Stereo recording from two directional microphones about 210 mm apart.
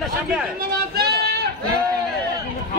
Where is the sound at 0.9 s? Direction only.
50° right (ahead or behind).